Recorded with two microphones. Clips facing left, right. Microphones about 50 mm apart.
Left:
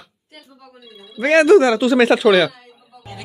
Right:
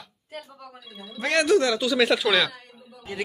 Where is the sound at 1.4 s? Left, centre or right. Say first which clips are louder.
Left 9 dB; left.